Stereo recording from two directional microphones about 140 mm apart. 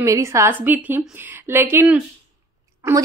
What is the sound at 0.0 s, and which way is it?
A woman's voice, 20° right (ahead or behind).